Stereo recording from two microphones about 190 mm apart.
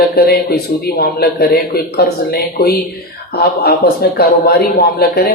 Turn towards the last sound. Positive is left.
turn(degrees=55)  # may be behind; listen again after turning